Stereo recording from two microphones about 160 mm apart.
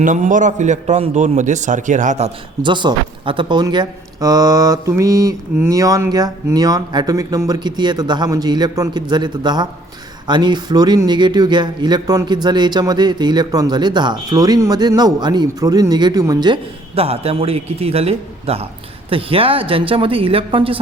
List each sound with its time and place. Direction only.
0.0 s a man's voice: 50° right (ahead or behind)
2.6 s speech: 30° right (ahead or behind)
16.9 s a man's voice: 40° right (ahead or behind)